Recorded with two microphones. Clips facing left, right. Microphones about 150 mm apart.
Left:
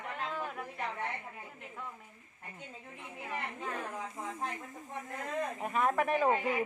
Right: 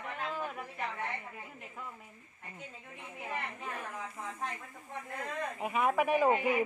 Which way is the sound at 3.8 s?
30° left (ahead or behind).